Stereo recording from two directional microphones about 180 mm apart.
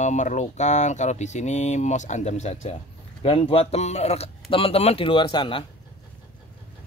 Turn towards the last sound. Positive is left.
turn(degrees=25)  # may be behind; listen again after turning